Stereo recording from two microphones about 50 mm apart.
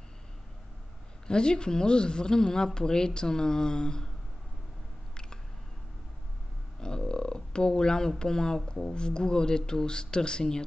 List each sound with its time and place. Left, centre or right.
1.2 s speech: centre
6.8 s a sound: centre
8.2 s speech: centre